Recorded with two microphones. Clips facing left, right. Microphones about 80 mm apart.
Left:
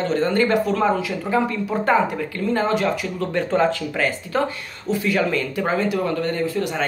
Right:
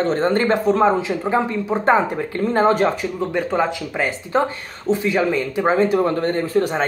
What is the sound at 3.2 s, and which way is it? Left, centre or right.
Speech, centre.